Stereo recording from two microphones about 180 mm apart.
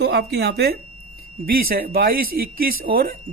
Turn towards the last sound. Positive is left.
turn(degrees=-55)  # may be behind; listen again after turning